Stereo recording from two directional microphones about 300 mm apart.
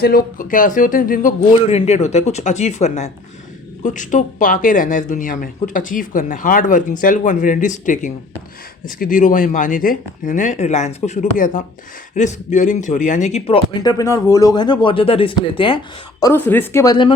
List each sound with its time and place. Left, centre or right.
0.0 s speech: left
13.8 s speech: centre